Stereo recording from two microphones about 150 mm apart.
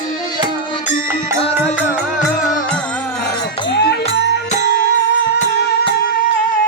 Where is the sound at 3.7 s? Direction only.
90° left.